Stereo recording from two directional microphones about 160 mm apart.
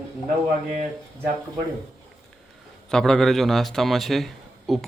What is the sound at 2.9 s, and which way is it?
A man's voice, 5° left (ahead or behind).